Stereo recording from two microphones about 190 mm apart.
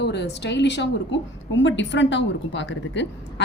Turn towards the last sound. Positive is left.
turn(degrees=70)  # may be behind; listen again after turning